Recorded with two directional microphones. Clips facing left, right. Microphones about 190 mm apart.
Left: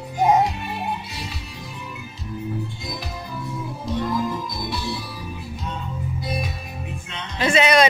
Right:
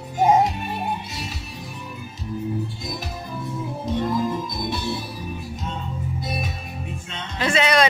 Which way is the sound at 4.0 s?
20° right (ahead or behind).